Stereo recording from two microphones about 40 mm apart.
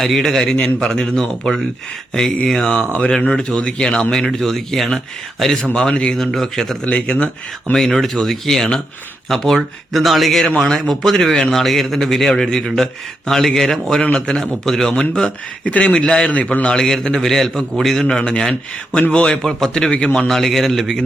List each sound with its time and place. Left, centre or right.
0.0 s speech: centre
0.5 s speech: left
4.3 s speech: centre
5.6 s speech: left
6.1 s speech: centre
9.6 s speech: centre
14.0 s speech: left
14.6 s speech: centre
15.6 s speech: left
16.3 s a man's voice: left
16.7 s speech: centre
19.4 s speech: centre